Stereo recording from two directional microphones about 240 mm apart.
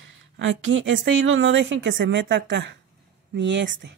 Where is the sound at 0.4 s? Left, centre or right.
Right.